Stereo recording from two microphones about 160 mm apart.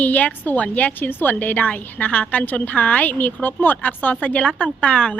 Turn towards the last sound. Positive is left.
turn(degrees=5)  # may be behind; listen again after turning